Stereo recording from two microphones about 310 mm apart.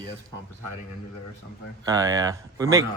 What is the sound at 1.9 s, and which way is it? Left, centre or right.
Speech, centre.